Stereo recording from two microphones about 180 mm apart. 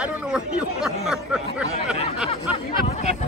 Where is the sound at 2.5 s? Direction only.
35° left (ahead or behind).